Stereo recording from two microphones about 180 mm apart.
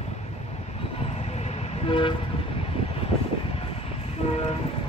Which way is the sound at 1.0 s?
35° left (ahead or behind).